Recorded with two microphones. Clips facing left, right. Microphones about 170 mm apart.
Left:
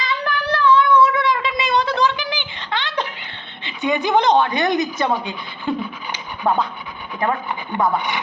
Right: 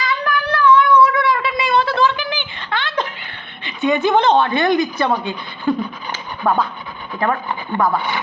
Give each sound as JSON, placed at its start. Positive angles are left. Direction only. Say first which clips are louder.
{"t": 0.3, "sound": "a sound", "louder": "right 2 dB", "side_deg": 25}
{"t": 3.6, "sound": "a woman's voice", "louder": "right 4 dB", "side_deg": 20}
{"t": 7.7, "sound": "speech", "louder": "right 1 dB", "side_deg": 15}